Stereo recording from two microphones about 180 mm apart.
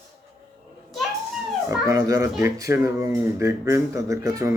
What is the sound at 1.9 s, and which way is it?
Speech, 15° right (ahead or behind).